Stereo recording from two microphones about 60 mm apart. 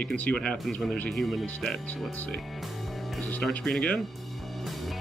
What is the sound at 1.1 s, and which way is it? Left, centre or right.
Speech, centre.